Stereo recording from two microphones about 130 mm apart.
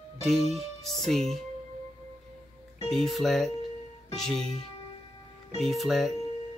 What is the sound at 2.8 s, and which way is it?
Speech, centre (ahead or behind).